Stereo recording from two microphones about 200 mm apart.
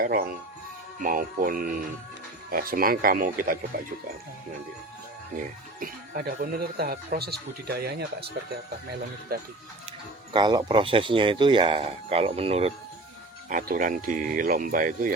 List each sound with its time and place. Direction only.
0.0 s speech: 45° right (ahead or behind)
5.4 s speech: 45° right (ahead or behind)
10.3 s speech: 20° right (ahead or behind)
13.5 s speech: 40° right (ahead or behind)